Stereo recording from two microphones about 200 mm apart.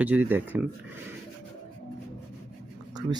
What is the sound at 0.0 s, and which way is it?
Speech, 10° right (ahead or behind).